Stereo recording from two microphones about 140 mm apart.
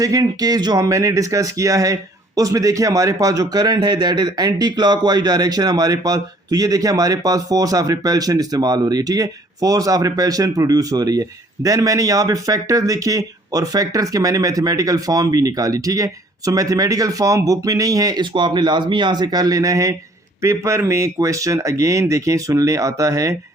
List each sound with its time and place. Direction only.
0.0 s speech: 25° right (ahead or behind)